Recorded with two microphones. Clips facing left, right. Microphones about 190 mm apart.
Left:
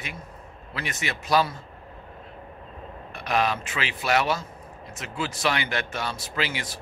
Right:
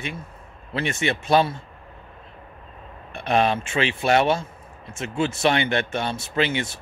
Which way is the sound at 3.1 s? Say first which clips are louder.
Right 4 dB; 25° right (ahead or behind).